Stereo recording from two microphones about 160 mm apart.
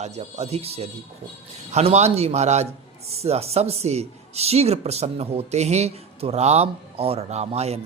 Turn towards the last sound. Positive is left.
turn(degrees=-40)  # may be behind; listen again after turning